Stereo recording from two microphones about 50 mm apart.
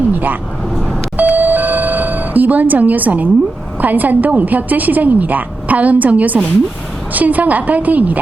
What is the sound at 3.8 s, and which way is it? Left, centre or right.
A woman's voice, right.